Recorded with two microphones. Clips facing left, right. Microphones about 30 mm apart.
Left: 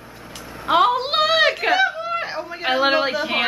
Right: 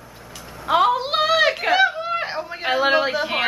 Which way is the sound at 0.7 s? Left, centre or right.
Centre.